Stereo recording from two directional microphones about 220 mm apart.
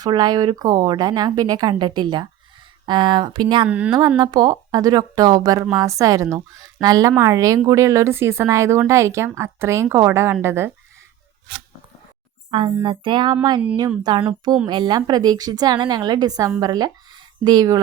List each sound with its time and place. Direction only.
0.0 s speech: 20° right (ahead or behind)
3.7 s speech: 5° right (ahead or behind)
4.2 s speech: 20° right (ahead or behind)
12.5 s speech: 25° right (ahead or behind)